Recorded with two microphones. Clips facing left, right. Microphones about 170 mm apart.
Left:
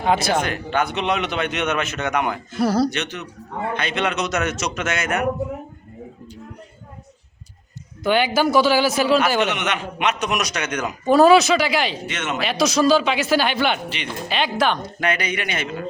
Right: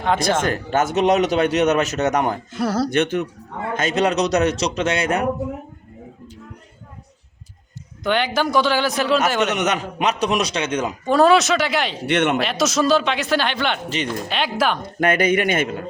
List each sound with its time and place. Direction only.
0.0 s speech: 5° left (ahead or behind)
0.4 s a man's voice: 45° right (ahead or behind)
2.6 s a man's voice: centre (ahead or behind)
2.9 s speech: 50° right (ahead or behind)
3.8 s a man's voice: 40° right (ahead or behind)
8.0 s a man's voice: 5° left (ahead or behind)
9.6 s a man's voice: 40° right (ahead or behind)
11.0 s a man's voice: 5° left (ahead or behind)
12.0 s speech: 60° right (ahead or behind)
12.4 s a man's voice: centre (ahead or behind)
13.9 s a man's voice: 40° right (ahead or behind)
14.3 s a man's voice: centre (ahead or behind)
14.8 s speech: 50° right (ahead or behind)